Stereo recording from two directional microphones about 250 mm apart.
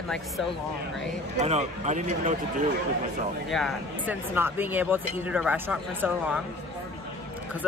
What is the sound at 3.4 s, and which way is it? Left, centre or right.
Speech, centre.